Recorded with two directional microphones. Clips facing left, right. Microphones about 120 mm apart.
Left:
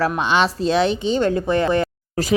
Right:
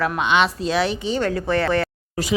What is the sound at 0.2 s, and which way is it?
Speech, 35° left (ahead or behind).